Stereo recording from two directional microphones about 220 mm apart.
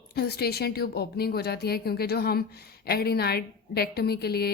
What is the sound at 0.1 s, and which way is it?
A woman's voice, 45° left (ahead or behind).